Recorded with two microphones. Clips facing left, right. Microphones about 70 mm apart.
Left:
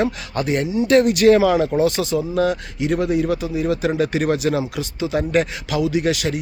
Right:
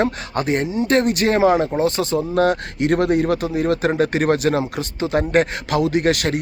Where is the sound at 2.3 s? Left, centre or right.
Right.